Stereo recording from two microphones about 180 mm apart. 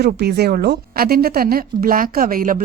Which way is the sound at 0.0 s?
60° right (ahead or behind).